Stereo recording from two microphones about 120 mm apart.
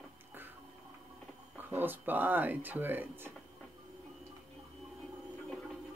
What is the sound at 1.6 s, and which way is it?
Speech, 15° right (ahead or behind).